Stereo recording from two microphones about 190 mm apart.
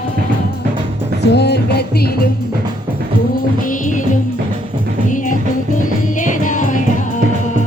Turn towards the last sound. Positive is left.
turn(degrees=40)  # may be behind; listen again after turning